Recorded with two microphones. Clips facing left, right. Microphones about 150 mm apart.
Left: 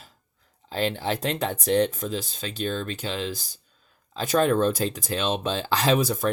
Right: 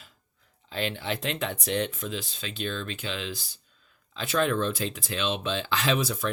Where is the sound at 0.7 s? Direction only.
40° left (ahead or behind).